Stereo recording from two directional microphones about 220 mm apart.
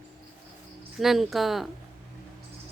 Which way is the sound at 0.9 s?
Centre (ahead or behind).